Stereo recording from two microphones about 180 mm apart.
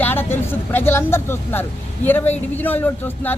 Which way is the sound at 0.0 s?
10° left (ahead or behind).